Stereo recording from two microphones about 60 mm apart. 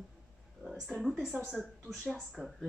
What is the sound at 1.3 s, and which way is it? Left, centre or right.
Speech, right.